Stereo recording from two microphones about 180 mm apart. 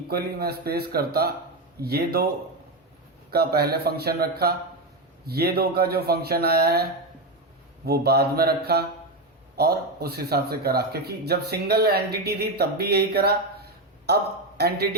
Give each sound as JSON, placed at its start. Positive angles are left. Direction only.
{"t": 0.1, "sound": "a man's voice", "side_deg": -60}
{"t": 3.3, "sound": "a man's voice", "side_deg": -60}
{"t": 7.9, "sound": "a man's voice", "side_deg": -60}